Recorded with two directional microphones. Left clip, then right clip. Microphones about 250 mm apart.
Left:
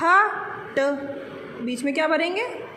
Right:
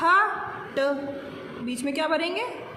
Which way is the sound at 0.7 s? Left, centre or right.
Centre.